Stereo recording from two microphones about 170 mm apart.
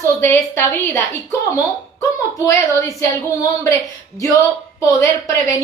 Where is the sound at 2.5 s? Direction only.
20° left (ahead or behind).